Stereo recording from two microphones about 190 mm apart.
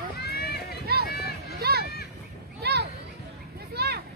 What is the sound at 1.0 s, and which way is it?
Run, 55° left (ahead or behind).